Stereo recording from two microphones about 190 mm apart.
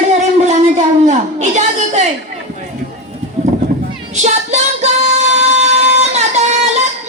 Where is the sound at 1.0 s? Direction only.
40° right (ahead or behind).